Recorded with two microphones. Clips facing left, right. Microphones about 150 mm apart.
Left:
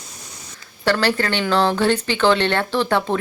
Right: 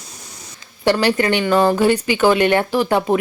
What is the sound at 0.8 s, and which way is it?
Speech, 20° right (ahead or behind).